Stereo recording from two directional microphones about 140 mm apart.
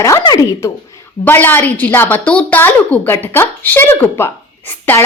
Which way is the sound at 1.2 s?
15° left (ahead or behind).